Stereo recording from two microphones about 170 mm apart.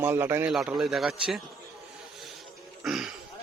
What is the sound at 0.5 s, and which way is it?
Speech, centre (ahead or behind).